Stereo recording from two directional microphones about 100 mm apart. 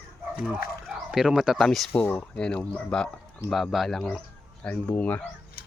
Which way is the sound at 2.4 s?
10° left (ahead or behind).